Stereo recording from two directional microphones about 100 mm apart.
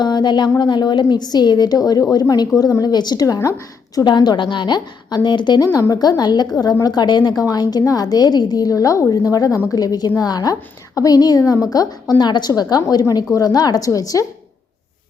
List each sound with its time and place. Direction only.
0.0 s a woman's voice: 45° left (ahead or behind)
3.9 s a woman's voice: 45° left (ahead or behind)
5.9 s a woman's voice: 40° left (ahead or behind)